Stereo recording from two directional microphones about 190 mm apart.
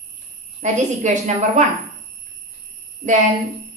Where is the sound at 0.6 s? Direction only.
40° right (ahead or behind).